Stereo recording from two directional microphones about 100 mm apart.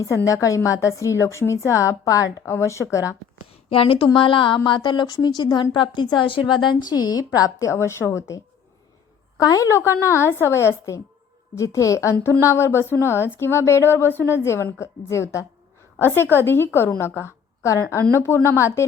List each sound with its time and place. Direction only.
0.0 s a woman's voice: 30° left (ahead or behind)
3.7 s a woman's voice: 65° left (ahead or behind); by 8.4 s 30° left (ahead or behind)
9.4 s a woman's voice: 35° left (ahead or behind)